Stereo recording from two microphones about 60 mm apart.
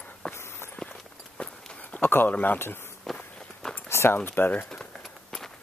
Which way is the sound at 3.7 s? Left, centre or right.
Left.